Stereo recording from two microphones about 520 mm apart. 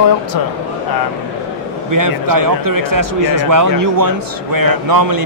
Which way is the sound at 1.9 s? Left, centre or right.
Right.